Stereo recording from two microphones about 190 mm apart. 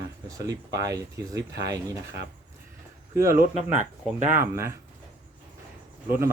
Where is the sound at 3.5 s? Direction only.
40° right (ahead or behind).